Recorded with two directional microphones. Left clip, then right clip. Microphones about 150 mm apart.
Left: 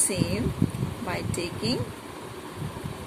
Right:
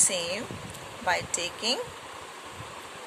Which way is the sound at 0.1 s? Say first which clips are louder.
Left 1 dB; 55° right (ahead or behind).